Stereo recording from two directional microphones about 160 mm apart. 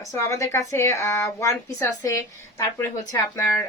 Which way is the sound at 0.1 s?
20° left (ahead or behind).